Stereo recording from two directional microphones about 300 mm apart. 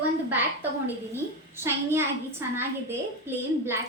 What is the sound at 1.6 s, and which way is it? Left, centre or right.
A child's voice, centre.